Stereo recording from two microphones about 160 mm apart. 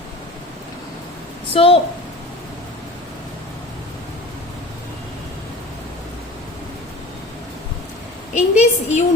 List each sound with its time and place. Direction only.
1.5 s a woman's voice: 35° left (ahead or behind)
8.4 s a woman's voice: 45° left (ahead or behind)